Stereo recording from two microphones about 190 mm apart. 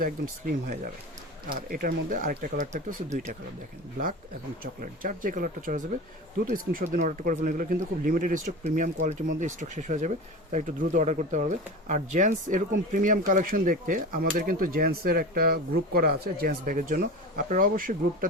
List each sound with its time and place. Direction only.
0.0 s speech: 50° right (ahead or behind)
4.6 s speech: 45° right (ahead or behind)